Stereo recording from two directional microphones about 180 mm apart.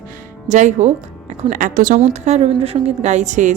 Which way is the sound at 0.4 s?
45° right (ahead or behind).